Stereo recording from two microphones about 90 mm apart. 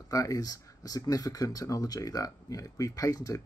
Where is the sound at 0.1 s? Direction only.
40° left (ahead or behind).